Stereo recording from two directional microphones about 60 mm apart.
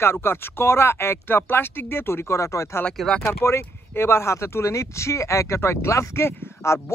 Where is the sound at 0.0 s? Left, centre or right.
Left.